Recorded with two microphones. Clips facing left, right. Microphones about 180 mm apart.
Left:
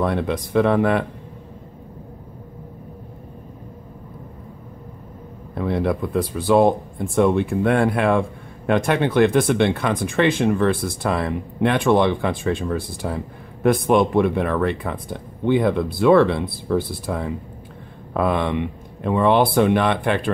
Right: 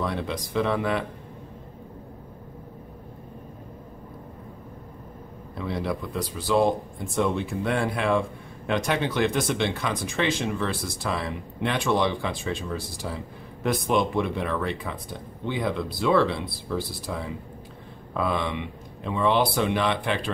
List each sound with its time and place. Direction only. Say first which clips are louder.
0.0 s speech: left 7 dB; 55° left (ahead or behind)
5.5 s speech: left 7 dB; 55° left (ahead or behind)